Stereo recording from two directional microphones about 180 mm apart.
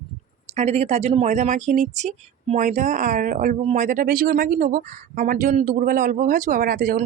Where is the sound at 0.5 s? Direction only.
35° right (ahead or behind).